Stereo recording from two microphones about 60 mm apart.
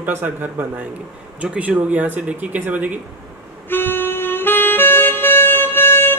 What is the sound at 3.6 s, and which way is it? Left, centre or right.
Music, left.